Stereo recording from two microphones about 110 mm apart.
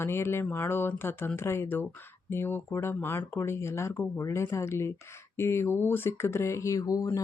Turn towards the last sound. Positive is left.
turn(degrees=30)  # may be behind; listen again after turning